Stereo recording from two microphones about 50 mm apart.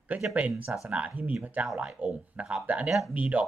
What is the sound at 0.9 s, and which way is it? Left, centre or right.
Speech, right.